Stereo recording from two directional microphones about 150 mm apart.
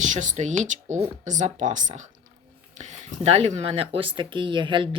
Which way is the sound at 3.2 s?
45° right (ahead or behind).